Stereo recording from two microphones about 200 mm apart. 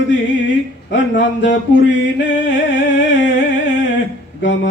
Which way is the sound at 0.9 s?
65° left (ahead or behind).